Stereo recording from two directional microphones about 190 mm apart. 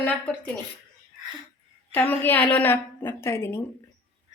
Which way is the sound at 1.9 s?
10° left (ahead or behind).